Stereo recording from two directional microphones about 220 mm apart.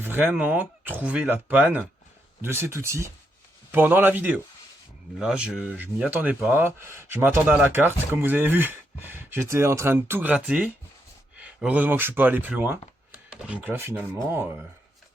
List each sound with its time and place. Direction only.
0.0 s speech: 10° right (ahead or behind)